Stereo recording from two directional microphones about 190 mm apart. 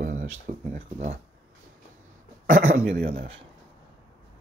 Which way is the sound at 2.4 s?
45° right (ahead or behind).